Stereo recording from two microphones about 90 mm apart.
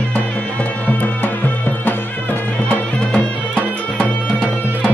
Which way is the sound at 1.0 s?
20° left (ahead or behind).